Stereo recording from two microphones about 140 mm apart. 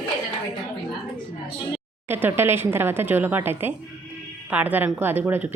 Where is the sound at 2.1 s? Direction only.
15° right (ahead or behind).